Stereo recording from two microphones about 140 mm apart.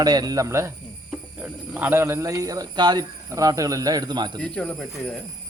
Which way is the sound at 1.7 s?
15° right (ahead or behind).